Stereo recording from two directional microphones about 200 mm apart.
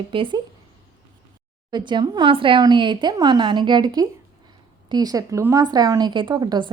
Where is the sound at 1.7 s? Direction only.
20° right (ahead or behind).